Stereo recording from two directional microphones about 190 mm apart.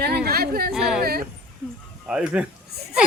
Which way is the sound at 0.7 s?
Centre (ahead or behind).